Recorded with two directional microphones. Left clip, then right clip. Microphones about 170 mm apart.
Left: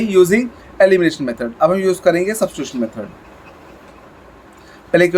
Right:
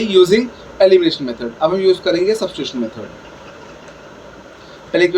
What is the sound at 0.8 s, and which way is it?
Speech, 50° left (ahead or behind).